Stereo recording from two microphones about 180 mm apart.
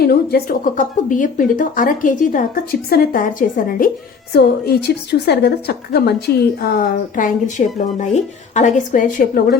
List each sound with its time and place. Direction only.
0.0 s a woman's voice: 60° left (ahead or behind)